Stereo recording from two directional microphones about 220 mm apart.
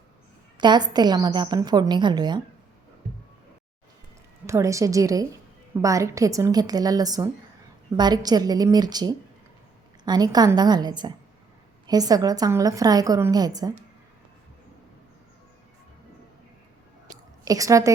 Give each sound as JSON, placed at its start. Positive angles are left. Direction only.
{"t": 0.5, "sound": "a woman's voice", "side_deg": -20}
{"t": 4.4, "sound": "a woman's voice", "side_deg": -15}
{"t": 17.1, "sound": "a sound", "side_deg": -15}